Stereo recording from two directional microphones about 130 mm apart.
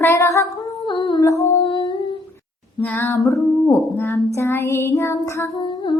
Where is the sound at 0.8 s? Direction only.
40° left (ahead or behind).